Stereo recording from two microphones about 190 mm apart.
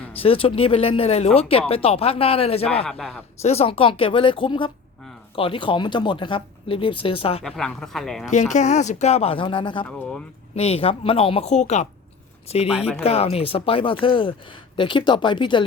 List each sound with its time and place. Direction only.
0.2 s speech: 30° left (ahead or behind)
2.8 s speech: 5° left (ahead or behind)
3.4 s speech: 30° left (ahead or behind)
7.4 s speech: 5° left (ahead or behind)
8.3 s speech: 40° left (ahead or behind)
13.0 s speech: 30° left (ahead or behind)